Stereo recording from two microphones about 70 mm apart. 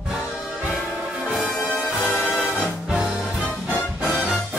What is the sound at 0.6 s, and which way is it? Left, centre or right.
Music, centre.